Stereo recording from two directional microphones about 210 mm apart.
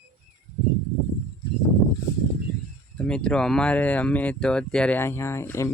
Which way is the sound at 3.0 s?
5° left (ahead or behind).